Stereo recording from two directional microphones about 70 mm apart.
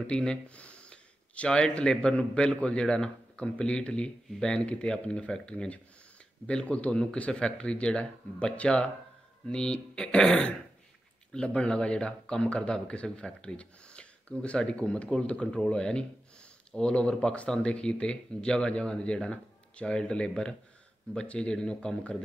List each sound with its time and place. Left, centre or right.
0.0 s speech: centre